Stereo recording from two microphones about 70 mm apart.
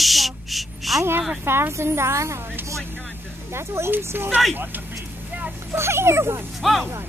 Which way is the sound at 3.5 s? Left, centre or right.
Right.